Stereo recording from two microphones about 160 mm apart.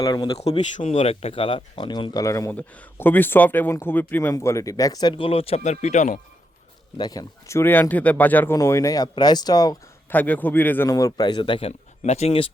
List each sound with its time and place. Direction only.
0.0 s speech: 25° left (ahead or behind)
0.3 s speech: 40° left (ahead or behind)
6.9 s speech: 25° left (ahead or behind)
10.1 s speech: 10° left (ahead or behind); by 12.5 s 40° left (ahead or behind)